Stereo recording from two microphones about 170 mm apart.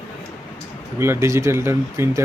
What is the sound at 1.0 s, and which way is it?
Speech, 15° right (ahead or behind).